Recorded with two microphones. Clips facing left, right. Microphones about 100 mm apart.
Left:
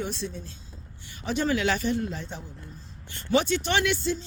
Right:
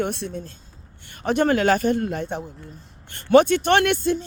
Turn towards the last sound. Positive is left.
turn(degrees=-55)  # may be behind; listen again after turning